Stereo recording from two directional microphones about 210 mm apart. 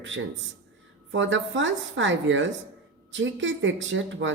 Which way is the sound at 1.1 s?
65° right (ahead or behind).